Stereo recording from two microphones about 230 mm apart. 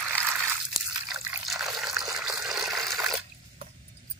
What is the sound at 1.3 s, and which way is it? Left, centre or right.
Water, centre.